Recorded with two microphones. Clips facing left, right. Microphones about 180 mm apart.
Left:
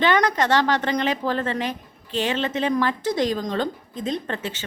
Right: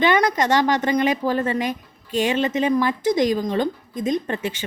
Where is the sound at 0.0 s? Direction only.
10° right (ahead or behind).